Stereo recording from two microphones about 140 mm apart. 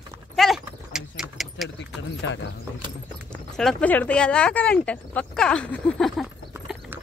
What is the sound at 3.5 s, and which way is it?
Speech, 5° left (ahead or behind).